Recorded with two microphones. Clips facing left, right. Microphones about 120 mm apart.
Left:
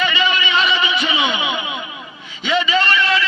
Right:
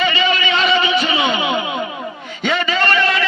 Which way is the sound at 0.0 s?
35° right (ahead or behind).